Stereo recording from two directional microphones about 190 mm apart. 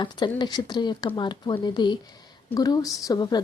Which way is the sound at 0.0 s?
25° left (ahead or behind).